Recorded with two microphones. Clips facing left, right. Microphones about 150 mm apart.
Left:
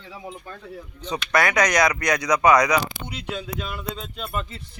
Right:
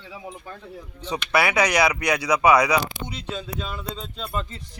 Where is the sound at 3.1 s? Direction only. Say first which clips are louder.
Left 1 dB; 10° left (ahead or behind).